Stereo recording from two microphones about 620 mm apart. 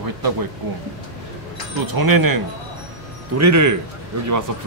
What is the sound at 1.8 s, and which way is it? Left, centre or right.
Speech, right.